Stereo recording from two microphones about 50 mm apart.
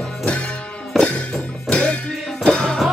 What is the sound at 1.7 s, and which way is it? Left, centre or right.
Music, left.